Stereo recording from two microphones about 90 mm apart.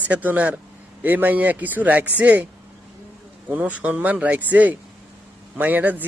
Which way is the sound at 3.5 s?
15° right (ahead or behind).